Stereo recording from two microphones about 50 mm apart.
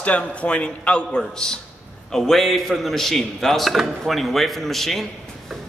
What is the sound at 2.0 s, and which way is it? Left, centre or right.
Speech, centre.